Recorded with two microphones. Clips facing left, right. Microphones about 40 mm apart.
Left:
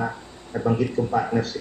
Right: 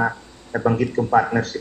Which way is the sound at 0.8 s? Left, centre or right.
Right.